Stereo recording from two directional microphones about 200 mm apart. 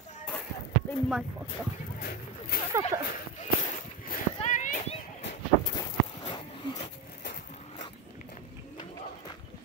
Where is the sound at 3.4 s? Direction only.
35° left (ahead or behind).